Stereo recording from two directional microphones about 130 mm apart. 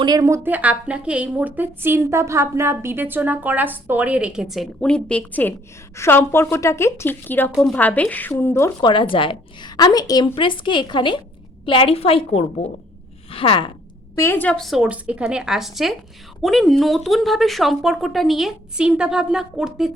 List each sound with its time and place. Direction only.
0.0 s a woman's voice: 30° right (ahead or behind); by 8.7 s 20° left (ahead or behind)
8.8 s a woman's voice: 40° left (ahead or behind); by 12.7 s 55° left (ahead or behind)
13.3 s a sound: 45° left (ahead or behind)
14.2 s speech: 15° left (ahead or behind); by 19.9 s 5° right (ahead or behind)